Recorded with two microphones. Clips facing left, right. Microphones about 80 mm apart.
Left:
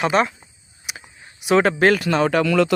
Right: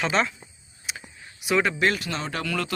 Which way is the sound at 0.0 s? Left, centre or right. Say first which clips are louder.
Left 6 dB; centre.